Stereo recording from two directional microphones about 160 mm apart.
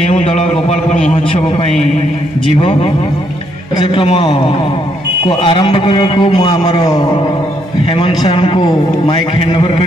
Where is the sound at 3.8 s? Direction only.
35° left (ahead or behind).